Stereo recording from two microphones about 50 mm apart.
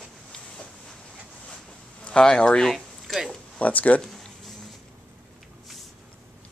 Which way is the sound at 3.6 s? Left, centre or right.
Left.